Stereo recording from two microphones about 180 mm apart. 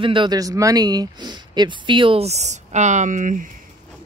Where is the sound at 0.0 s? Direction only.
25° right (ahead or behind); by 3.4 s 45° right (ahead or behind).